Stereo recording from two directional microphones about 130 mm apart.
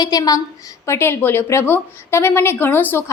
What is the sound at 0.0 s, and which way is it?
A woman's voice, 30° left (ahead or behind).